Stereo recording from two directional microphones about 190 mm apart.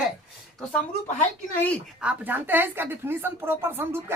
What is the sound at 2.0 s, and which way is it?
A woman's voice, 5° right (ahead or behind).